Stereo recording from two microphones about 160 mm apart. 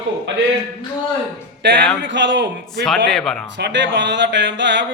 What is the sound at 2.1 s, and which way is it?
Speech, 90° right.